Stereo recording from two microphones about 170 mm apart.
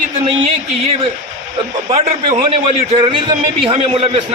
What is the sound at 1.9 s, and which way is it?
A man's voice, 35° right (ahead or behind).